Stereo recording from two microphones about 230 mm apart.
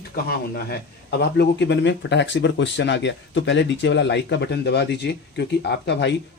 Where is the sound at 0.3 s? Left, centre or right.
Left.